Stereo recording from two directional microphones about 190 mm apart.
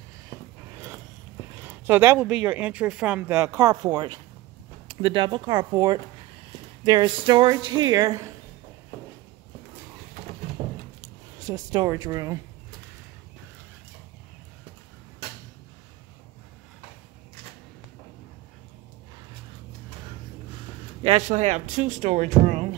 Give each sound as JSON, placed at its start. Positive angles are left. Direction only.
{"t": 1.6, "sound": "speech", "side_deg": -10}
{"t": 10.6, "sound": "a sound", "side_deg": -35}
{"t": 11.0, "sound": "speech", "side_deg": -20}
{"t": 21.0, "sound": "speech", "side_deg": -35}